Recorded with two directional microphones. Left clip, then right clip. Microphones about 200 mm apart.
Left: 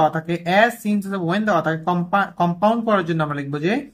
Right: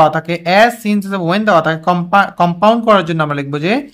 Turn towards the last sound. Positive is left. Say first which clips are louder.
# right 7 dB
turn(degrees=-25)  # may be behind; listen again after turning